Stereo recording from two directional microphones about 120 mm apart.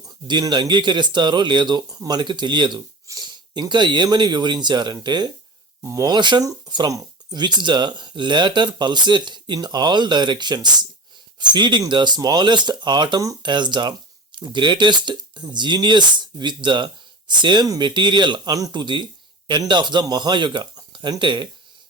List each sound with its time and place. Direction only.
0.3 s speech: 40° right (ahead or behind)